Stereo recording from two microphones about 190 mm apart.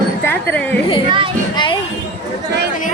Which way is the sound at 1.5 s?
25° left (ahead or behind).